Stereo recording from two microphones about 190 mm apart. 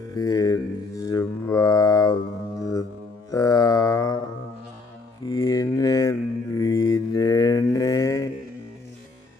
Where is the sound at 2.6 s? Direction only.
20° left (ahead or behind).